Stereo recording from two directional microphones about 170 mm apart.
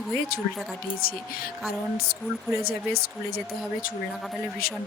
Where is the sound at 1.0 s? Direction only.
60° left (ahead or behind).